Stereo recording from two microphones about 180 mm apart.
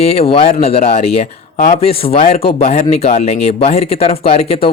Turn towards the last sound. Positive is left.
turn(degrees=35)  # may be behind; listen again after turning